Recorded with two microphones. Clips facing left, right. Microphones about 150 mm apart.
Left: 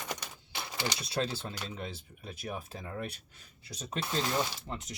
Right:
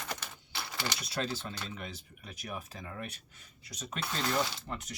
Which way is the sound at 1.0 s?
30° left (ahead or behind).